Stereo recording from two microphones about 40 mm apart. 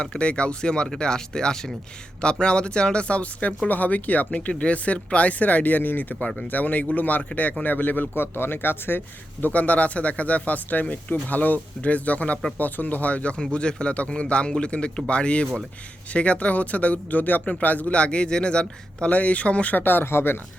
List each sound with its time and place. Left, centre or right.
0.0 s speech: left
3.7 s speech: left
8.1 s speech: left
9.4 s speech: left
13.4 s speech: left
17.9 s speech: left
19.7 s speech: left